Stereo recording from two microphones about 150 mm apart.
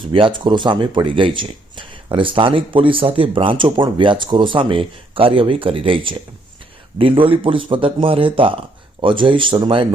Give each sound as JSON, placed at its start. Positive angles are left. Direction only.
{"t": 0.1, "sound": "speech", "side_deg": -35}